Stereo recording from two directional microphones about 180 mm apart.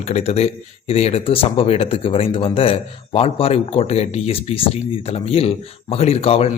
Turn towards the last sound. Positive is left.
turn(degrees=35)  # may be behind; listen again after turning